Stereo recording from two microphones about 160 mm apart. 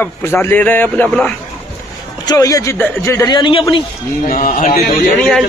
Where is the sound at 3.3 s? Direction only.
30° left (ahead or behind).